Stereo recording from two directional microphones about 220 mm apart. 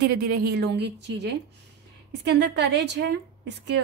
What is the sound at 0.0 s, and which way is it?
A woman's voice, 45° right (ahead or behind).